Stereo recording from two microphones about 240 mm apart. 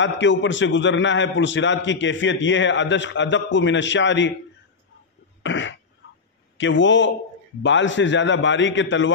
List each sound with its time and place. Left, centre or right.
0.0 s a man's voice: left
5.4 s cough: left
6.6 s a man's voice: left